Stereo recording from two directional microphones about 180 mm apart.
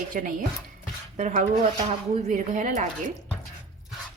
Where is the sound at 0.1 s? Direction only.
50° right (ahead or behind).